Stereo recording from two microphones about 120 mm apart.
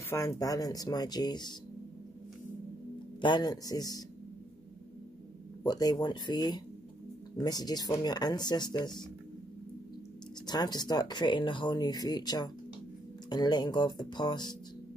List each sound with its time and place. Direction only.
0.1 s speech: 30° left (ahead or behind)
3.2 s speech: 40° left (ahead or behind)
5.6 s speech: 35° left (ahead or behind)
10.4 s speech: 35° left (ahead or behind)